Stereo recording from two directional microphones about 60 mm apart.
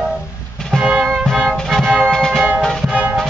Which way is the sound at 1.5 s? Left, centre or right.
Centre.